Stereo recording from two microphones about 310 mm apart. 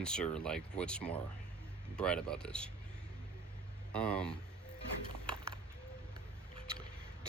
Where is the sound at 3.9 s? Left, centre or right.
Centre.